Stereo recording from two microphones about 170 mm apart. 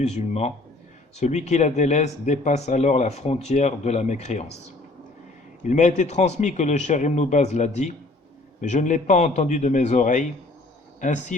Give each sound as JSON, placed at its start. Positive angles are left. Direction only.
{"t": 0.0, "sound": "speech", "side_deg": 40}
{"t": 5.6, "sound": "a man's voice", "side_deg": 45}